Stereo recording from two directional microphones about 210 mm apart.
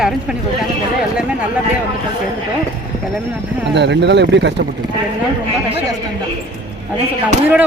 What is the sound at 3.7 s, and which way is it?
Speech, 55° right (ahead or behind).